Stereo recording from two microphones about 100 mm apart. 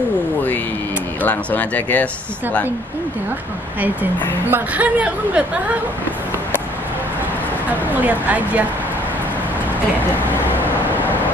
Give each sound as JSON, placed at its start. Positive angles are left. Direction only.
{"t": 1.2, "sound": "speech", "side_deg": 15}
{"t": 4.5, "sound": "speech", "side_deg": -15}
{"t": 7.9, "sound": "speech", "side_deg": -15}